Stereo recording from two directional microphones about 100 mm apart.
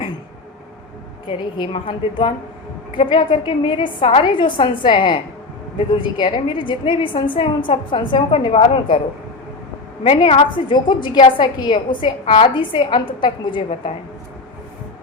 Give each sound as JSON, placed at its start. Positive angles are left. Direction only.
{"t": 1.3, "sound": "a woman's voice", "side_deg": 50}
{"t": 10.0, "sound": "a woman's voice", "side_deg": 60}